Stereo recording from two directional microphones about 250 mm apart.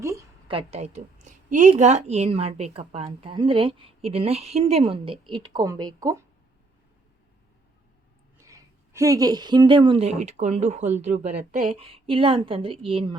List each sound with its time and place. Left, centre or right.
0.0 s a sound: centre
0.5 s a woman's voice: right
8.4 s a woman's voice: centre